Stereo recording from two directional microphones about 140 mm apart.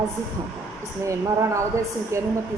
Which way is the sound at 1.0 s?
20° right (ahead or behind).